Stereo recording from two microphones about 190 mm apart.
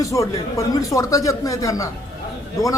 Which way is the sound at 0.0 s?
15° left (ahead or behind).